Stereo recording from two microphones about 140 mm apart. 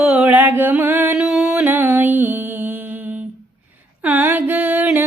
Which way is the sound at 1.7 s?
15° right (ahead or behind).